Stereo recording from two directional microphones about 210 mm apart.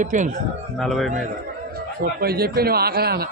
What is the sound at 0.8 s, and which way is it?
Speech, centre (ahead or behind).